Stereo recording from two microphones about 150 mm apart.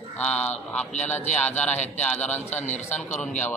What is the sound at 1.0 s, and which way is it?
Speech, 50° left (ahead or behind).